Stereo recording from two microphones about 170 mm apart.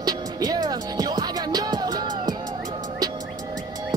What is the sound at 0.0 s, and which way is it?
Music, 25° right (ahead or behind).